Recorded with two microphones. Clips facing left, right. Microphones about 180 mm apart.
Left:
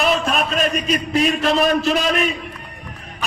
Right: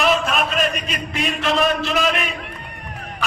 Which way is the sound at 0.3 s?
40° left (ahead or behind).